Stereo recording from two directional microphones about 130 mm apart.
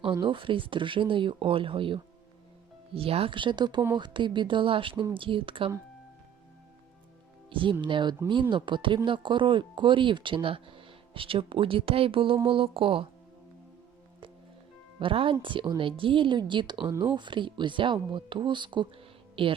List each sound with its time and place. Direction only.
0.0 s speech: 40° right (ahead or behind)
7.5 s speech: 40° right (ahead or behind)
14.9 s speech: 40° right (ahead or behind)